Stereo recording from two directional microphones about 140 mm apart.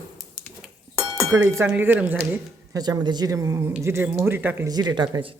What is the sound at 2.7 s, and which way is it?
Speech, 30° right (ahead or behind).